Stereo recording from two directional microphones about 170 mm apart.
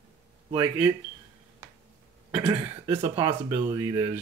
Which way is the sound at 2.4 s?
30° right (ahead or behind).